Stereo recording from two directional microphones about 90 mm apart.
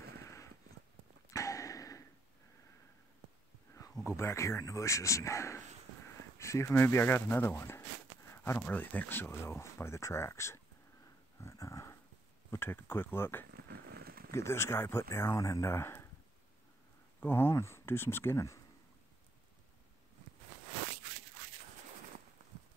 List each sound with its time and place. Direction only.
1.3 s a sound: 35° left (ahead or behind)
4.0 s speech: 30° left (ahead or behind)
8.3 s a sound: 30° left (ahead or behind)
8.6 s speech: 20° left (ahead or behind)
11.4 s dog: 35° left (ahead or behind)
12.4 s speech: 25° left (ahead or behind)
17.2 s speech: 25° left (ahead or behind)